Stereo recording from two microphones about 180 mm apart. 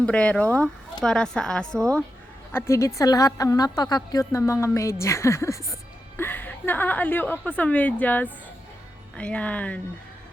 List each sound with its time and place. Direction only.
0.0 s a woman's voice: 5° left (ahead or behind)
2.5 s a woman's voice: 15° left (ahead or behind)